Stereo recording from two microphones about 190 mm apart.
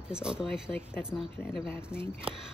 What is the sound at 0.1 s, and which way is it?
Speech, 5° right (ahead or behind).